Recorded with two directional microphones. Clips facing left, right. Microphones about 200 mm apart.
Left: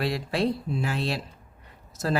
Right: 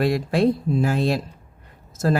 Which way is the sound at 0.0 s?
50° right (ahead or behind).